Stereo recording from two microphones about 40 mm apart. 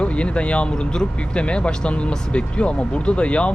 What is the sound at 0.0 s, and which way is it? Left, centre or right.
Speech, left.